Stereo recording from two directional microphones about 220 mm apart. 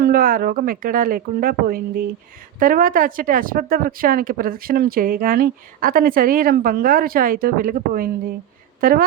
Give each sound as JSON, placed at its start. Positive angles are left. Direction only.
{"t": 0.0, "sound": "speech", "side_deg": -40}